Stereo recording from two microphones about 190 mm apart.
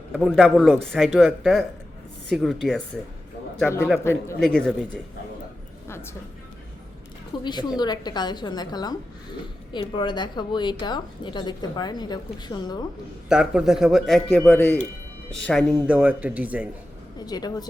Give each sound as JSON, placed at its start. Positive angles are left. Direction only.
{"t": 0.1, "sound": "a man's voice", "side_deg": 0}
{"t": 4.0, "sound": "a man's voice", "side_deg": 15}
{"t": 7.3, "sound": "a woman's voice", "side_deg": 25}
{"t": 13.2, "sound": "a man's voice", "side_deg": -5}
{"t": 15.9, "sound": "speech", "side_deg": -5}
{"t": 17.2, "sound": "a woman's voice", "side_deg": 20}